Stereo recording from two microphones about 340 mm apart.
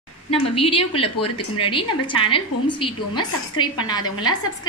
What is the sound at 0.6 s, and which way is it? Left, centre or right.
A woman's voice, centre.